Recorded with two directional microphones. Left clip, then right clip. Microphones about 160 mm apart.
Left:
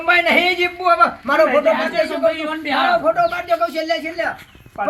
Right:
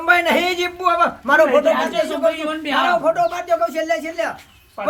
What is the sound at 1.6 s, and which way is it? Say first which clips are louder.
Speech: left 1 dB; 20° right (ahead or behind).